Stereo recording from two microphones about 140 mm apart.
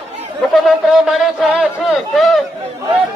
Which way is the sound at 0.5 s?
Centre (ahead or behind).